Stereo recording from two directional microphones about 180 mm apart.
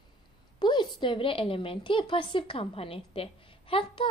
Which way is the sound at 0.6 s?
25° left (ahead or behind).